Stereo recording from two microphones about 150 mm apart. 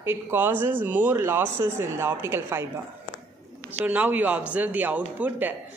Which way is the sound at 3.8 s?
10° right (ahead or behind).